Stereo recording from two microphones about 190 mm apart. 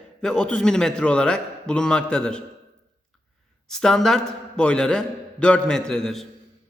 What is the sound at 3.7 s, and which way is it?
A man's voice, 5° left (ahead or behind).